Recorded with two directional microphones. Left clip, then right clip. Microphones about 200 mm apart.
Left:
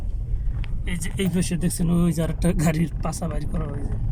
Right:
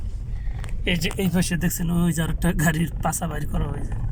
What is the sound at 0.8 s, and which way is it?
Speech, 5° right (ahead or behind).